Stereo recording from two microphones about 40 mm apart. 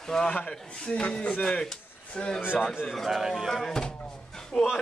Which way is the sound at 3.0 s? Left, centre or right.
Centre.